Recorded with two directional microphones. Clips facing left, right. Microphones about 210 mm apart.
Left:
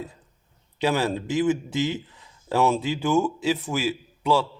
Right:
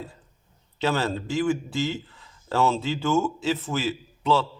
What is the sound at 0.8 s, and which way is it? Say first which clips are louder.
A man's voice: left 2 dB; 15° left (ahead or behind).